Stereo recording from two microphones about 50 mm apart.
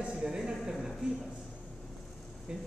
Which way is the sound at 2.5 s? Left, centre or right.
Centre.